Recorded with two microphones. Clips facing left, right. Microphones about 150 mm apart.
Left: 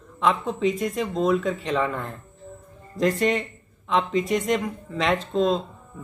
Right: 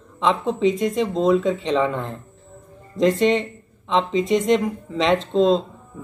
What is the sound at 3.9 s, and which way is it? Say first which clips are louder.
Speech: right 3 dB; 25° right (ahead or behind).